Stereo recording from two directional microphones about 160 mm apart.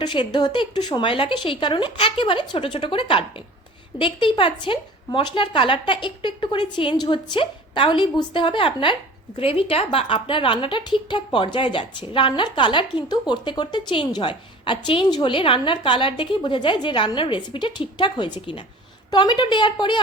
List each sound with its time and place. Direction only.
0.0 s a woman's voice: 30° left (ahead or behind)